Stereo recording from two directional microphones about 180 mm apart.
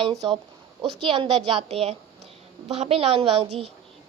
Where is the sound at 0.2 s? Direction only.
25° right (ahead or behind).